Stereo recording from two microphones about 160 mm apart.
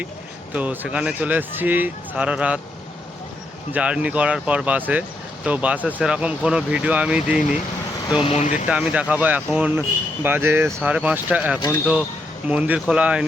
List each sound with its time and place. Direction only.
0.5 s speech: 10° right (ahead or behind)
3.7 s speech: 5° right (ahead or behind)
8.2 s speech: 45° left (ahead or behind)
8.6 s speech: 5° right (ahead or behind)